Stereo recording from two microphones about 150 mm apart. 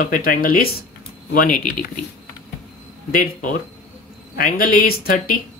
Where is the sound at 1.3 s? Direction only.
70° left (ahead or behind).